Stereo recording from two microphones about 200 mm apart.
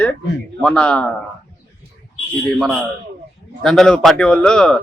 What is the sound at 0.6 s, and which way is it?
Speech, 5° left (ahead or behind).